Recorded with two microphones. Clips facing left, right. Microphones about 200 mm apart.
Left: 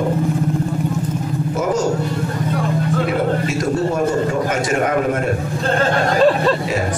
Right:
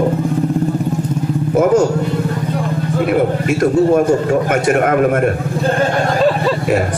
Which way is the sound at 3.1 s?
55° right (ahead or behind).